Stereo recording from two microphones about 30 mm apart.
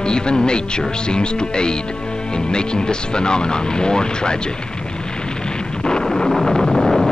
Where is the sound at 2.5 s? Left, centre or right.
Left.